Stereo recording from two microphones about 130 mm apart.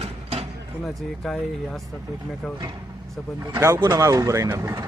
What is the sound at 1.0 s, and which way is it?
Speech, centre (ahead or behind).